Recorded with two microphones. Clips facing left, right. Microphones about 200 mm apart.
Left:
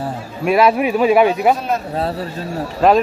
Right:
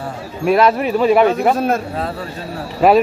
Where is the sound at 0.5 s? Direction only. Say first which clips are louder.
Even; 5° left (ahead or behind).